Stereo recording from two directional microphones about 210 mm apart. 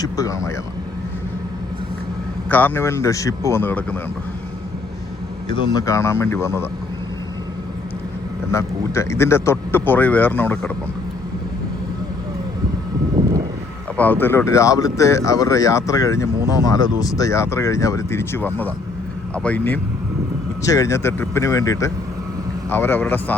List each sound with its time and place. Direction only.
0.0 s vehicle: 15° left (ahead or behind)
2.5 s speech: 10° left (ahead or behind)
5.7 s speech: 15° left (ahead or behind)
8.5 s speech: 15° left (ahead or behind)
13.9 s speech: 10° left (ahead or behind)